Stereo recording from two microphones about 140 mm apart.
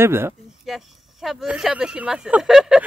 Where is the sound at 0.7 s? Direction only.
Centre (ahead or behind).